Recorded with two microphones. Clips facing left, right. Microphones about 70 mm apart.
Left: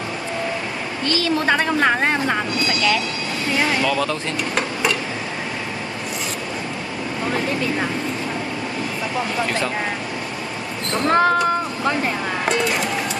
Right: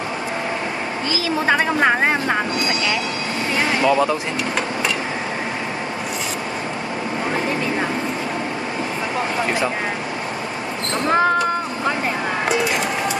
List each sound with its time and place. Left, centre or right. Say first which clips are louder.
1.0 s a woman's voice: left 1 dB; centre
11.1 s speech: left 1 dB; centre